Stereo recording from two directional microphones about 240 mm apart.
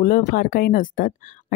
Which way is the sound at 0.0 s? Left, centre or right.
Left.